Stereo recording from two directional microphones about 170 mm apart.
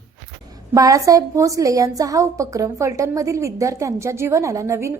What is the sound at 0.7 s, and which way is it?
A woman's voice, 20° right (ahead or behind).